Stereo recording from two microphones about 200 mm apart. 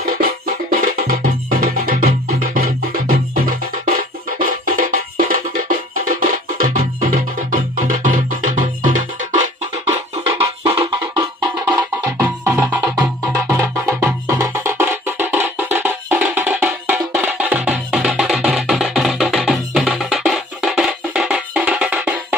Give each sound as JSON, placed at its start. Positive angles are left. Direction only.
{"t": 0.0, "sound": "music", "side_deg": -45}
{"t": 4.4, "sound": "music", "side_deg": -45}
{"t": 8.0, "sound": "music", "side_deg": -40}
{"t": 9.8, "sound": "music", "side_deg": -25}
{"t": 11.1, "sound": "music", "side_deg": -10}